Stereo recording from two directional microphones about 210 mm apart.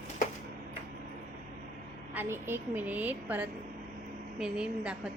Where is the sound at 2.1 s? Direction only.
10° right (ahead or behind).